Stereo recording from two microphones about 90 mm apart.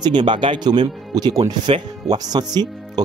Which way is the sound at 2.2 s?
50° right (ahead or behind).